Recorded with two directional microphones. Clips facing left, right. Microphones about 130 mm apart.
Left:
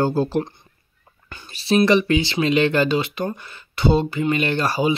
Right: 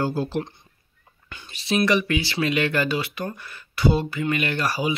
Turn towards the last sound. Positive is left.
turn(degrees=25)  # may be behind; listen again after turning